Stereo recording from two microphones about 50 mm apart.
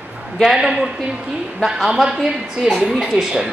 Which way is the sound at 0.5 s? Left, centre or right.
Centre.